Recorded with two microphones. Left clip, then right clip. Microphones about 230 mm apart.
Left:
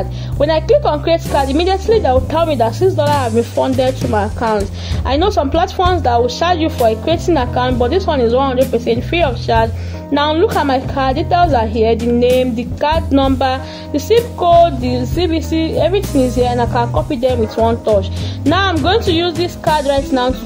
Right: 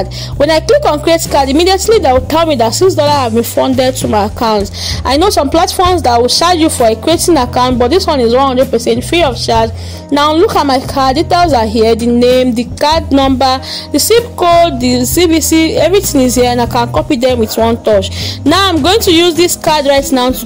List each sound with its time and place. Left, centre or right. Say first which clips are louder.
0.4 s music: right 4 dB; right